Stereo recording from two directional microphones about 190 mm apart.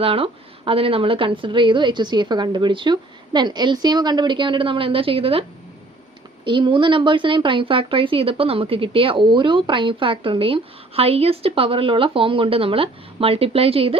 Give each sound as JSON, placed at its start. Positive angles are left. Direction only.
{"t": 0.0, "sound": "speech", "side_deg": -30}